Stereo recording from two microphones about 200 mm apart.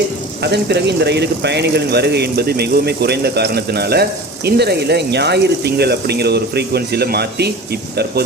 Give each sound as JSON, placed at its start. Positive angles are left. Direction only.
{"t": 0.4, "sound": "speech", "side_deg": -55}